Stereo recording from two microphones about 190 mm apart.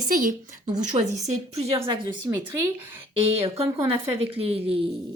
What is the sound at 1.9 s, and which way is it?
A woman's voice, 20° right (ahead or behind).